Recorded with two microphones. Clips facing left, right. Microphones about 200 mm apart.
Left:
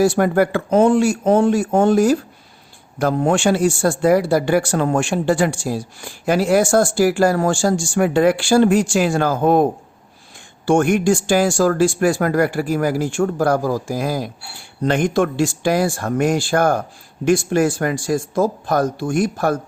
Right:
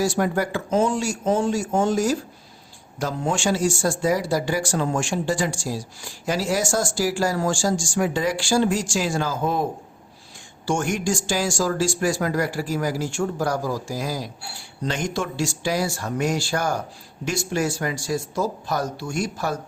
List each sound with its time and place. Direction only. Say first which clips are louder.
0.0 s speech: left 7 dB; 60° left (ahead or behind)
10.7 s speech: left 9 dB; 60° left (ahead or behind)